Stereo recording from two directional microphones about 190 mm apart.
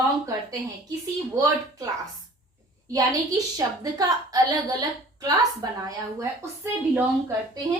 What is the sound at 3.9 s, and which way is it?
A woman's voice, 20° right (ahead or behind).